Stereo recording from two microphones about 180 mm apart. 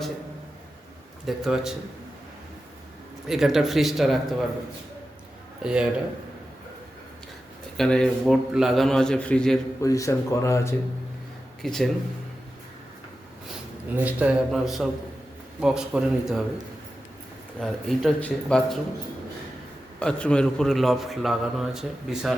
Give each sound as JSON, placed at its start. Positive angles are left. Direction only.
{"t": 1.3, "sound": "a man's voice", "side_deg": 0}
{"t": 3.2, "sound": "a man's voice", "side_deg": 0}
{"t": 5.6, "sound": "a man's voice", "side_deg": -5}
{"t": 7.8, "sound": "a man's voice", "side_deg": 5}
{"t": 9.8, "sound": "speech", "side_deg": 20}
{"t": 11.6, "sound": "a man's voice", "side_deg": 0}
{"t": 13.9, "sound": "a man's voice", "side_deg": -10}
{"t": 17.6, "sound": "a man's voice", "side_deg": 0}
{"t": 20.0, "sound": "a man's voice", "side_deg": 5}